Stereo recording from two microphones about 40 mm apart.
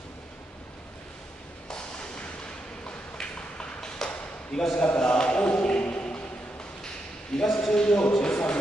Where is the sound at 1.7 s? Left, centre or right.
Left.